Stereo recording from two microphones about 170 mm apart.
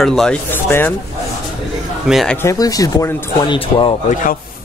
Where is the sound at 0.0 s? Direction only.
5° left (ahead or behind).